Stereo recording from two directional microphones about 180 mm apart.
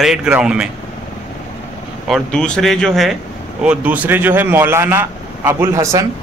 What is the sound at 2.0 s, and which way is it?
A man's voice, centre (ahead or behind).